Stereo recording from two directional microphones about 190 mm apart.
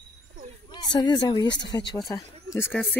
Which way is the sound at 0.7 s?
20° left (ahead or behind).